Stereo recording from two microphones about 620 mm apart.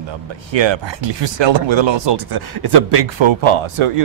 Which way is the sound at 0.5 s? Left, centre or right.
Right.